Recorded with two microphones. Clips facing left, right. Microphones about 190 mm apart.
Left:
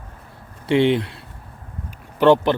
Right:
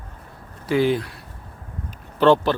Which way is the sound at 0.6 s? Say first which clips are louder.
Left 3 dB; 25° left (ahead or behind).